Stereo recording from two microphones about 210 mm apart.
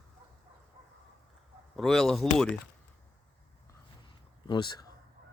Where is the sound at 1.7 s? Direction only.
Centre (ahead or behind).